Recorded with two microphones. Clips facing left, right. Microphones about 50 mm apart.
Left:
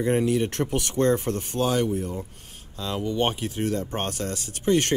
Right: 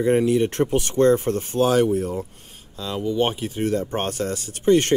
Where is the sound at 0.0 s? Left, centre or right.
Centre.